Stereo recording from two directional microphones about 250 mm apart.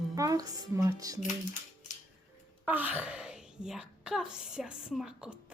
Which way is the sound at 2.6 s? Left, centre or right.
Centre.